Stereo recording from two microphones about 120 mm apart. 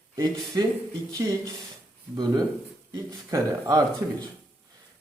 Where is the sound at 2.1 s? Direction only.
30° right (ahead or behind).